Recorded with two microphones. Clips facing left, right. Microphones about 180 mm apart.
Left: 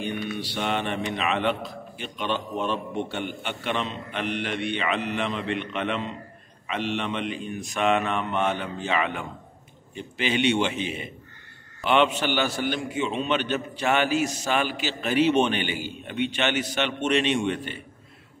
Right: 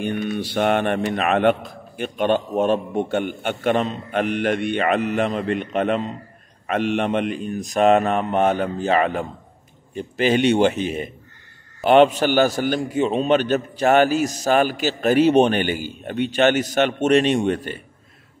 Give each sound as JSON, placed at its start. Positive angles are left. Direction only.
{"t": 0.0, "sound": "a man's voice", "side_deg": -50}